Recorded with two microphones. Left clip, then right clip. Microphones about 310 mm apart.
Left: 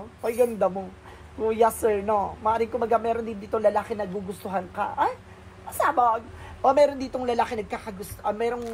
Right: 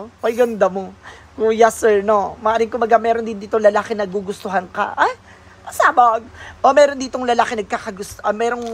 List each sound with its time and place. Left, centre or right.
0.2 s a woman's voice: right